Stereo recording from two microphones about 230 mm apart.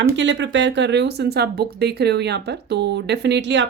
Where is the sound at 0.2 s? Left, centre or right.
Right.